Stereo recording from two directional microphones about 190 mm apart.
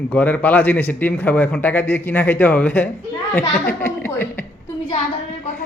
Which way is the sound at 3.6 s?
10° left (ahead or behind).